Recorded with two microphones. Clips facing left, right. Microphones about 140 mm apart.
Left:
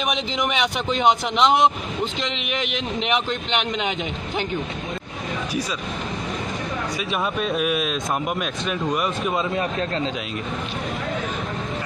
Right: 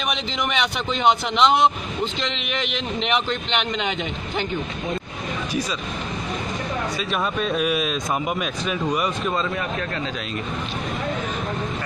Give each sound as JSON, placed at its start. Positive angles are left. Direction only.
{"t": 0.0, "sound": "a man's voice", "side_deg": 10}
{"t": 7.1, "sound": "speech", "side_deg": 0}
{"t": 9.4, "sound": "a man's voice", "side_deg": 30}